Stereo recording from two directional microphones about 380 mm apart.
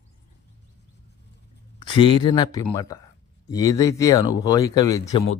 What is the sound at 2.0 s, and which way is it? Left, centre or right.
Speech, centre.